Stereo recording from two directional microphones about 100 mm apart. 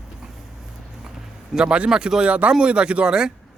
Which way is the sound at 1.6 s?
10° right (ahead or behind).